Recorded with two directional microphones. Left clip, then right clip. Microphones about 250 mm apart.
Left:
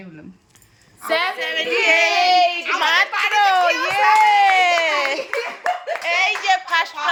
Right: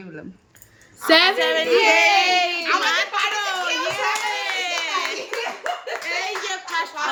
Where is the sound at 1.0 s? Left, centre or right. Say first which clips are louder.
Right 5 dB; right.